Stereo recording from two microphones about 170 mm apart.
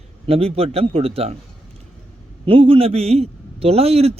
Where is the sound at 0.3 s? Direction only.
35° right (ahead or behind).